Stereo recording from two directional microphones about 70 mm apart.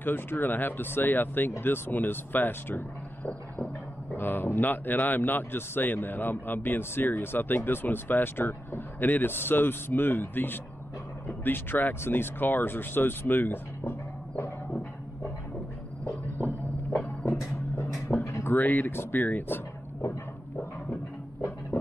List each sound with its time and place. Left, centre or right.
0.0 s a man's voice: left
4.1 s a man's voice: left
17.2 s a sound: left
18.5 s a man's voice: left
21.4 s music: left